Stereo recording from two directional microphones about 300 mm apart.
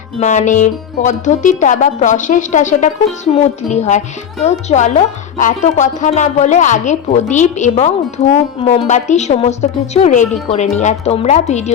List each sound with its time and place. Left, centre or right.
0.2 s a woman's voice: left